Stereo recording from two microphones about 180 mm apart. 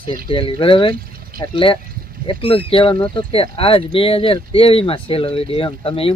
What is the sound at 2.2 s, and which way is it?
Speech, 30° left (ahead or behind).